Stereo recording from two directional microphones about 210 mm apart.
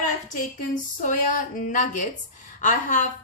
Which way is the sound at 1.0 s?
40° left (ahead or behind).